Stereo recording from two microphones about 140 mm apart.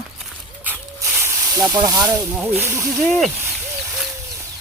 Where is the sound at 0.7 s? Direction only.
20° right (ahead or behind).